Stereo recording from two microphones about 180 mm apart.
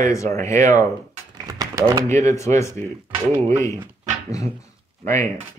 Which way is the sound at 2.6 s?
15° left (ahead or behind).